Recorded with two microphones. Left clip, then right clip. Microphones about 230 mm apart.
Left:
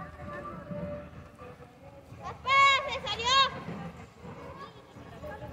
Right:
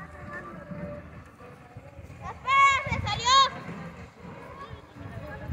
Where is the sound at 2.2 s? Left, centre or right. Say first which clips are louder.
Right 2 dB; left.